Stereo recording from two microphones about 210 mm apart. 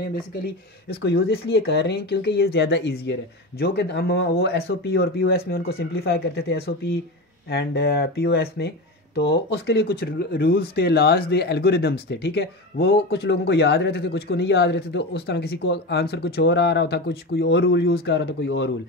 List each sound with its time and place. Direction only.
1.0 s speech: 50° left (ahead or behind)